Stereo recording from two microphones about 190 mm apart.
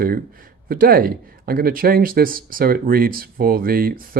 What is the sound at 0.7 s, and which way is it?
Speech, 50° right (ahead or behind).